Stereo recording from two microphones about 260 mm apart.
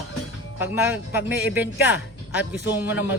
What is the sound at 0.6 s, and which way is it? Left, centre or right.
Speech, centre.